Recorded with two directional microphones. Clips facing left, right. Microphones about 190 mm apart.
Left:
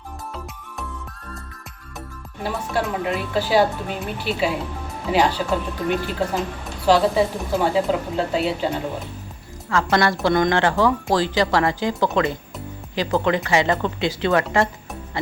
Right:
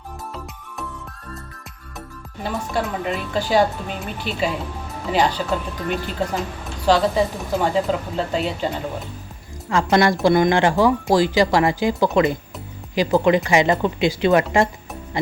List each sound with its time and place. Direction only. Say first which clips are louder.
2.4 s a woman's voice: even; 5° left (ahead or behind)
9.9 s speech: right 4 dB; 15° right (ahead or behind)